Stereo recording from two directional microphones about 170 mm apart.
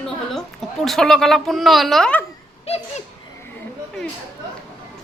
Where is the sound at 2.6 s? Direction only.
40° left (ahead or behind).